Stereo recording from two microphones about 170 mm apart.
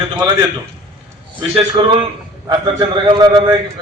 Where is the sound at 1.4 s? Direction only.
30° right (ahead or behind).